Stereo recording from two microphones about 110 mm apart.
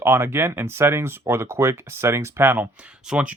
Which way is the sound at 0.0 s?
20° right (ahead or behind).